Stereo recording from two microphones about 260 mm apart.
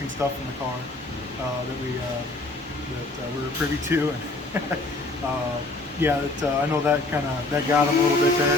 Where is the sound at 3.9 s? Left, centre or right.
Centre.